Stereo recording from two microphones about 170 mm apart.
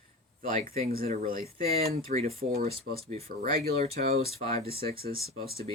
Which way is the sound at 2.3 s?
60° right (ahead or behind).